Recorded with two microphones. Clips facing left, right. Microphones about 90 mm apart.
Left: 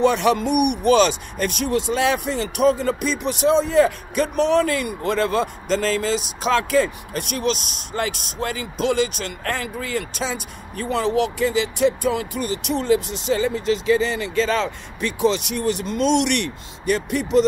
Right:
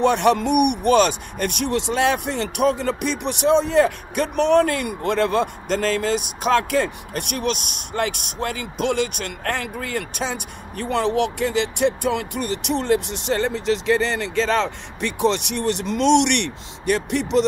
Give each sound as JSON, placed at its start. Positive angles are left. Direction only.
{"t": 0.0, "sound": "speech", "side_deg": -60}